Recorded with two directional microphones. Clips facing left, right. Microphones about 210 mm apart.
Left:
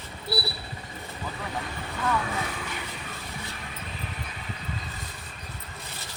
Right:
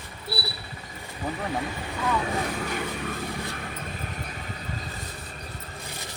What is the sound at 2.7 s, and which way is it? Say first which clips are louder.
Vehicle: right 7 dB; 50° right (ahead or behind).